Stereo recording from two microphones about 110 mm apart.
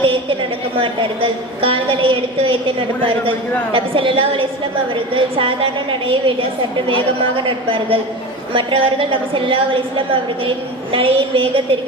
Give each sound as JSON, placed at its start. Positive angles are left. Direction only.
{"t": 0.0, "sound": "a sound", "side_deg": -50}
{"t": 0.8, "sound": "a woman's voice", "side_deg": -55}
{"t": 10.9, "sound": "a woman's voice", "side_deg": -55}